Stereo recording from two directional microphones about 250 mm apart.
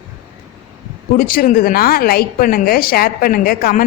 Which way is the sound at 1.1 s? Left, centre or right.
Left.